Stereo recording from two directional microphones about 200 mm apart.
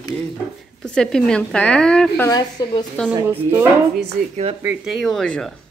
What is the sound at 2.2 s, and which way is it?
Speech, 20° left (ahead or behind).